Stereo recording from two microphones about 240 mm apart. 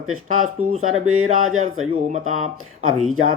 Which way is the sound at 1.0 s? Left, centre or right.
Right.